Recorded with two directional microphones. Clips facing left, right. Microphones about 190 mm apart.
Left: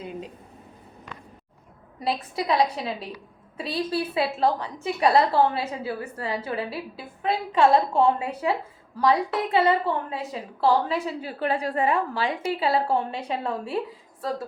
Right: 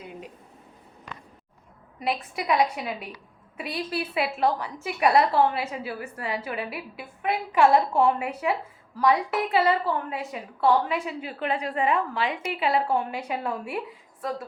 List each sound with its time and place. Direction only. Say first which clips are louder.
2.0 s a woman's voice: left 1 dB; 30° left (ahead or behind)